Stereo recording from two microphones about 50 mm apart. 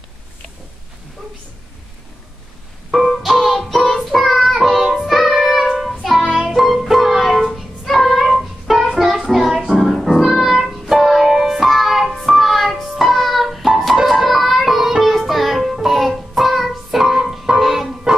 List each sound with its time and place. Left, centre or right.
2.9 s music: centre
7.8 s child singing: centre
9.3 s music: centre